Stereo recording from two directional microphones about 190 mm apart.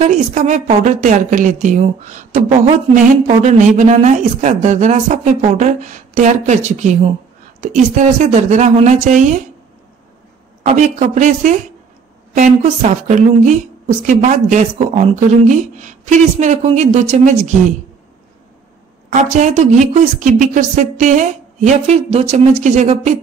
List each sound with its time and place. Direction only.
0.0 s a woman's voice: 40° right (ahead or behind)
10.7 s a woman's voice: 40° right (ahead or behind)
19.0 s a woman's voice: 40° right (ahead or behind)